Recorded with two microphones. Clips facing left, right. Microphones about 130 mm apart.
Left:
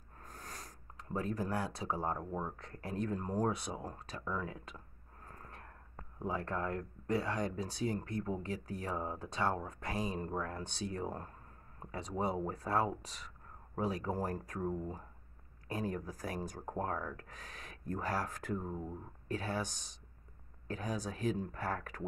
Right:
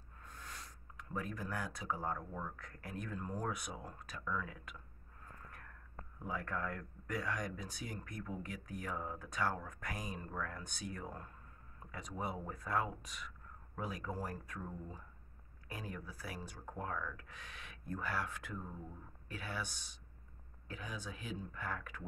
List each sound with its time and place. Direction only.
0.2 s speech: 40° left (ahead or behind)